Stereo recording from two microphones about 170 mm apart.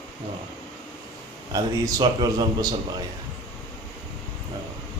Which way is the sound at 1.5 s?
20° right (ahead or behind).